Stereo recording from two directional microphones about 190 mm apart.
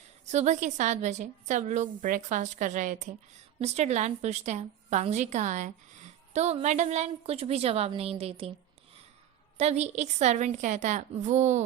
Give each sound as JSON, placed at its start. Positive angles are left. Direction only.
{"t": 0.3, "sound": "a woman's voice", "side_deg": -35}
{"t": 9.6, "sound": "a woman's voice", "side_deg": -35}